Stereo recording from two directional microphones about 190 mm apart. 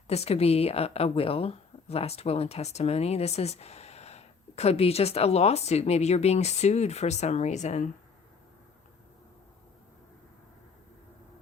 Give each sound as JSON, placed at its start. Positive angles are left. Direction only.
{"t": 0.1, "sound": "speech", "side_deg": 35}